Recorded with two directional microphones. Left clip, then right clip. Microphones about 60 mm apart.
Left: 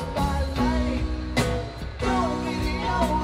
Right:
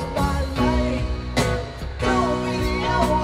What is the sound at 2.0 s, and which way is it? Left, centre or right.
Music, centre.